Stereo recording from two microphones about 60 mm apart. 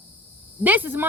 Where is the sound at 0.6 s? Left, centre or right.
Right.